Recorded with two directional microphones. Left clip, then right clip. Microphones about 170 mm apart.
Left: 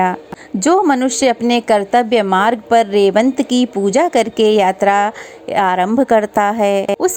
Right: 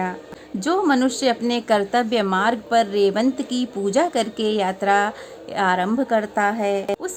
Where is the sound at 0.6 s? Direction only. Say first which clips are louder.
Left 7 dB; 40° left (ahead or behind).